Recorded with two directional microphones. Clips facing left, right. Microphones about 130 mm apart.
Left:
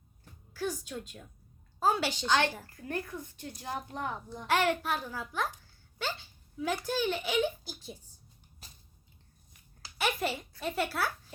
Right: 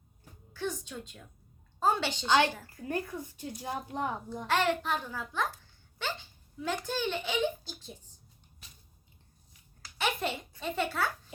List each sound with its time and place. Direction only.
0.5 s a woman's voice: 5° left (ahead or behind)
2.0 s speech: 15° right (ahead or behind)
4.4 s a child's voice: 15° left (ahead or behind)
6.7 s a child's voice: 10° left (ahead or behind)
8.6 s a sound: 40° left (ahead or behind)
10.0 s a sound: 5° left (ahead or behind)
10.6 s a child's voice: 5° left (ahead or behind)